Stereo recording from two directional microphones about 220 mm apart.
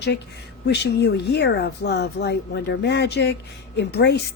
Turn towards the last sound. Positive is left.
turn(degrees=50)  # may be behind; listen again after turning